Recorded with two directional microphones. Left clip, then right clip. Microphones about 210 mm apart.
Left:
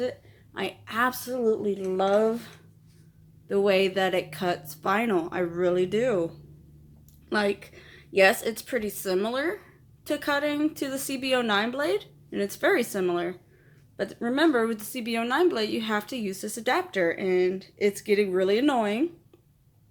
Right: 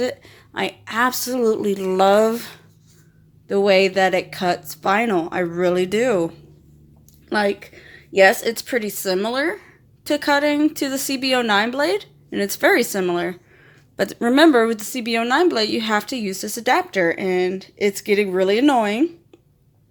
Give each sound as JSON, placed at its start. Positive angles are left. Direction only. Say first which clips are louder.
{"t": 0.0, "sound": "a sound", "louder": "right 7 dB", "side_deg": -35}
{"t": 0.6, "sound": "a woman's voice", "louder": "right 6 dB", "side_deg": -25}
{"t": 1.3, "sound": "speech", "louder": "right 6 dB", "side_deg": -35}
{"t": 3.4, "sound": "a woman's voice", "louder": "right 7 dB", "side_deg": -20}